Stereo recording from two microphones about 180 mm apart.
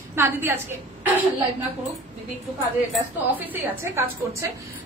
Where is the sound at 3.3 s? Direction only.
10° right (ahead or behind).